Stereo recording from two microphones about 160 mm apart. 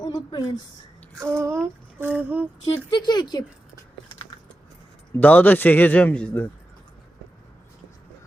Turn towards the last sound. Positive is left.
turn(degrees=10)  # may be behind; listen again after turning